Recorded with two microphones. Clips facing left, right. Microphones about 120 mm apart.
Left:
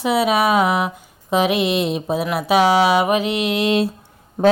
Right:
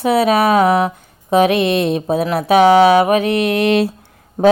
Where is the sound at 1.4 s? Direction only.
55° right (ahead or behind).